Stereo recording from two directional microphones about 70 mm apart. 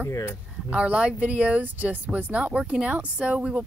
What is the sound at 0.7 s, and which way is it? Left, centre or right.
A woman's voice, centre.